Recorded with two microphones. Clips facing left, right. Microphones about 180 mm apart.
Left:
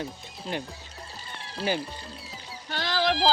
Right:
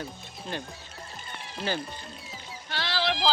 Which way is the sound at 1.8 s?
35° left (ahead or behind).